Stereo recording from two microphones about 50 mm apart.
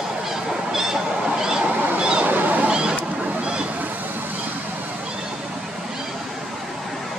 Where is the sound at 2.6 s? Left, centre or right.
Centre.